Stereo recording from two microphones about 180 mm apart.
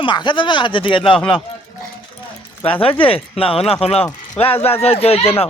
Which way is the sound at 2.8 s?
30° left (ahead or behind).